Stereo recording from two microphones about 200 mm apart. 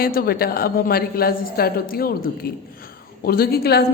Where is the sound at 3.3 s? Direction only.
50° left (ahead or behind).